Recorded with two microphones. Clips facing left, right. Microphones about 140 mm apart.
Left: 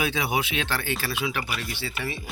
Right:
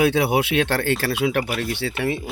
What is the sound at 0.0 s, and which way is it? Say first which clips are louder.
Speech: right 8 dB; 65° right (ahead or behind).